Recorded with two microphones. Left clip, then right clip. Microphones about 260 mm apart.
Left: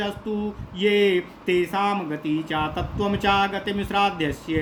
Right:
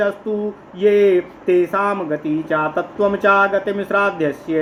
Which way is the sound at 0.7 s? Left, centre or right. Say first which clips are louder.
Right 6 dB; left.